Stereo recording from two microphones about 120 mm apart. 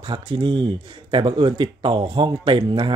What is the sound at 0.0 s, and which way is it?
Speech, 40° right (ahead or behind).